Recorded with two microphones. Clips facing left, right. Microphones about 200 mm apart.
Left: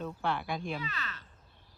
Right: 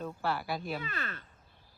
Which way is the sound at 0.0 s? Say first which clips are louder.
Even; 5° right (ahead or behind).